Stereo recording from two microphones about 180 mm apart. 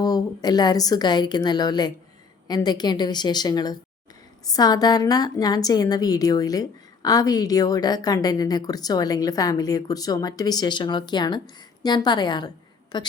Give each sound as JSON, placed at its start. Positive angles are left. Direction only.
{"t": 0.0, "sound": "a woman's voice", "side_deg": 20}